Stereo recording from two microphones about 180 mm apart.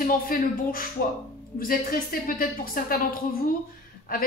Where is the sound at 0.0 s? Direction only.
50° left (ahead or behind).